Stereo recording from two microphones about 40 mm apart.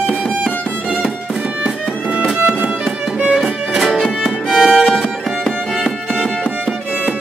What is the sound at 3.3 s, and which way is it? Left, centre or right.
Music, centre.